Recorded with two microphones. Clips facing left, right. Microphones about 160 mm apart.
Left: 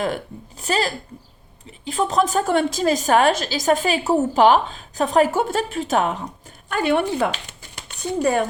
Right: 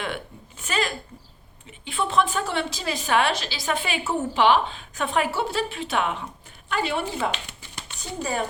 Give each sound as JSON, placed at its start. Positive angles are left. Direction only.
{"t": 0.0, "sound": "a woman's voice", "side_deg": 40}